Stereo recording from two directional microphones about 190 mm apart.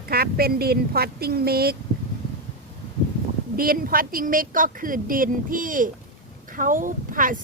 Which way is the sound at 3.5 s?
50° right (ahead or behind).